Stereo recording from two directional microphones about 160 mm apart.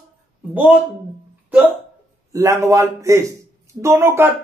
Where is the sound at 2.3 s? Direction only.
20° right (ahead or behind).